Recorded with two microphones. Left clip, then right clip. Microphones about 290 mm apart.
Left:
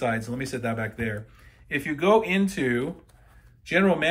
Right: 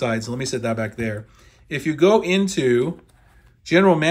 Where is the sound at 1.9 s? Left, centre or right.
Right.